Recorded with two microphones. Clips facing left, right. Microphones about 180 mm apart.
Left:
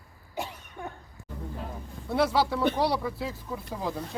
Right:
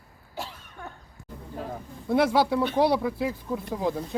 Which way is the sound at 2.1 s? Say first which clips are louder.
Right 3 dB; 15° right (ahead or behind).